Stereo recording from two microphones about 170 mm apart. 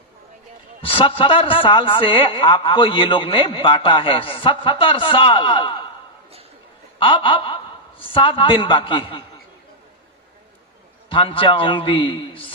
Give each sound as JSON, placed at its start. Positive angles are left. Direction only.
{"t": 0.8, "sound": "a man's voice", "side_deg": 30}
{"t": 7.0, "sound": "a woman's voice", "side_deg": 30}
{"t": 11.1, "sound": "a man's voice", "side_deg": 30}